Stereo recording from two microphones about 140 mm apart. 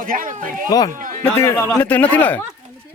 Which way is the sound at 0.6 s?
25° left (ahead or behind).